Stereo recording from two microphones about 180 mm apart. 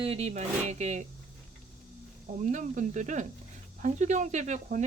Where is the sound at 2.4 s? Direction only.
45° right (ahead or behind).